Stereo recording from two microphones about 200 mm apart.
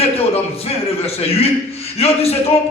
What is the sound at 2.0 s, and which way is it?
Speech, 30° left (ahead or behind).